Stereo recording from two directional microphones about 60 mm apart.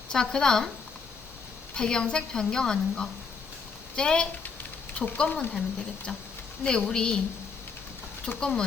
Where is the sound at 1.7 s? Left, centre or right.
Centre.